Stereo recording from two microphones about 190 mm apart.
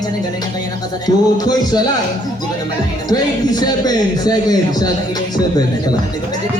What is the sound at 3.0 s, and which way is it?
A man's voice, 20° left (ahead or behind).